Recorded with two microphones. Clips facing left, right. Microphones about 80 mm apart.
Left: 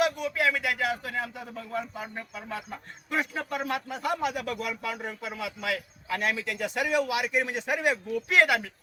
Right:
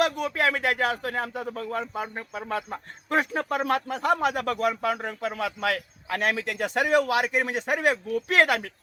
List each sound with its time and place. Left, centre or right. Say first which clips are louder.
0.0 s speech: right 2 dB; right